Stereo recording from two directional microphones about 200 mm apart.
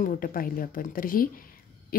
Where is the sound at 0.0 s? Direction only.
45° left (ahead or behind).